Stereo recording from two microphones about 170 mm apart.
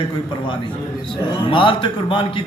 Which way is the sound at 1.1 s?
30° left (ahead or behind).